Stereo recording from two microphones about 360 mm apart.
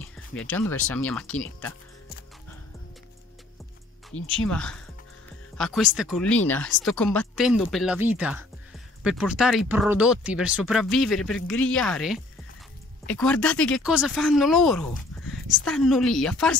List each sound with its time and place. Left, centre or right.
0.4 s speech: centre
4.1 s speech: left
4.5 s speech: centre